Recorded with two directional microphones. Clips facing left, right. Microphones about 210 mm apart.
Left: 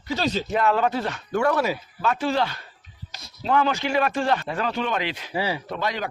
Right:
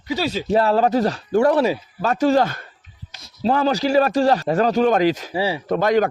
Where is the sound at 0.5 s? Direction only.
35° right (ahead or behind).